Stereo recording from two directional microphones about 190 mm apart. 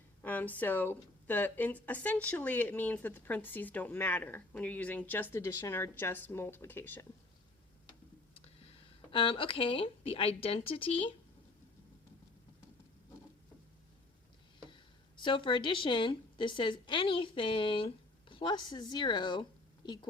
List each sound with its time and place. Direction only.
0.2 s speech: 10° left (ahead or behind)
7.9 s a sound: 30° left (ahead or behind)
14.7 s speech: 25° left (ahead or behind)